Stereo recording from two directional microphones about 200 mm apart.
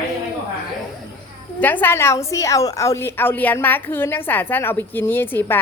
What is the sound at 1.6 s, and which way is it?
A woman's voice, 10° left (ahead or behind).